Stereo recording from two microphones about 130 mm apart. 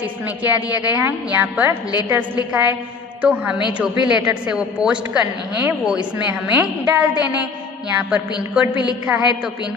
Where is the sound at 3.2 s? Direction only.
10° right (ahead or behind).